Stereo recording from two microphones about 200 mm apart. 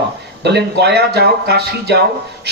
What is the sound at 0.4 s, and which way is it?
A man's voice, 55° right (ahead or behind).